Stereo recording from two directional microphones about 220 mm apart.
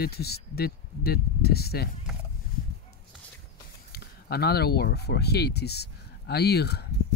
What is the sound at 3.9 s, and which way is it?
Speech, 45° left (ahead or behind).